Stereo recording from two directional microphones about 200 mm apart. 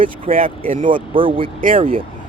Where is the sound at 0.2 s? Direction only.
45° right (ahead or behind).